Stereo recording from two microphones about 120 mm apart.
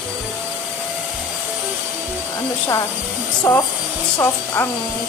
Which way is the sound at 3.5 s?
25° left (ahead or behind).